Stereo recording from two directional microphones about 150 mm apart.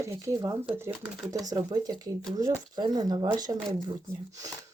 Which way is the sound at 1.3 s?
25° right (ahead or behind).